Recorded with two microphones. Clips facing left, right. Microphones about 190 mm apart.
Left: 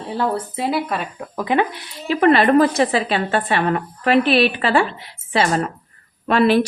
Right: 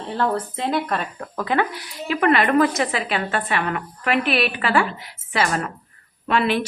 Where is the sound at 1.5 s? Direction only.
20° left (ahead or behind).